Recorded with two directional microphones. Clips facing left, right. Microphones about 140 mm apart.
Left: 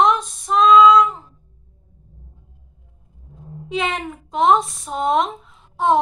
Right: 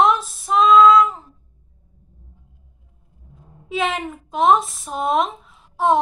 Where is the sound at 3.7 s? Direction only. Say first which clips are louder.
Right 1 dB; centre (ahead or behind).